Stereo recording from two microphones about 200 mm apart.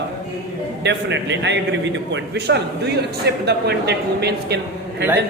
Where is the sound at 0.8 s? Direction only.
60° right (ahead or behind).